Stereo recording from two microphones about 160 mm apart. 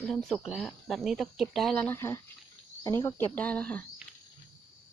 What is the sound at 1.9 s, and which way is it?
Speech, 15° left (ahead or behind).